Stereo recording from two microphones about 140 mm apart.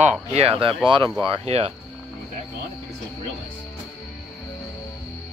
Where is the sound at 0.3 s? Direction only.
45° right (ahead or behind).